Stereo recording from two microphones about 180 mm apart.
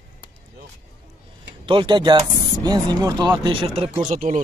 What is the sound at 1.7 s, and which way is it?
Speech, 25° right (ahead or behind).